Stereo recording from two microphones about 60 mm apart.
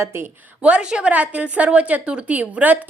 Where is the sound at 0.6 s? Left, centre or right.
Centre.